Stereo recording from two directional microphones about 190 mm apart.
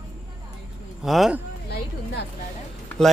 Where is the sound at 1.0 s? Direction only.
Centre (ahead or behind).